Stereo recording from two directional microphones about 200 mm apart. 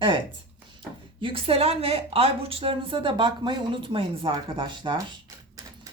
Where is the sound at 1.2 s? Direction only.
30° right (ahead or behind).